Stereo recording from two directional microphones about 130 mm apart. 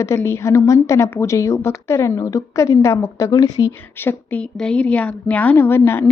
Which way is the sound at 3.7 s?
15° left (ahead or behind).